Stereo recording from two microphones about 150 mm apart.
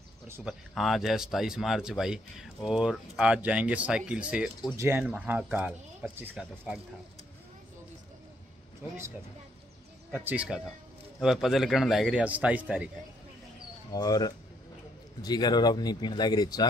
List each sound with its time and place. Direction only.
0.4 s speech: centre (ahead or behind)
10.1 s speech: 10° right (ahead or behind)
13.9 s speech: 25° left (ahead or behind)